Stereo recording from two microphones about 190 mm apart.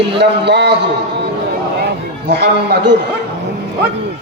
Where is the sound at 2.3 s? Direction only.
60° right (ahead or behind).